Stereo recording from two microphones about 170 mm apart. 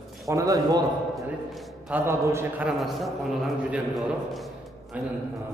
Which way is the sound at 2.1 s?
15° right (ahead or behind).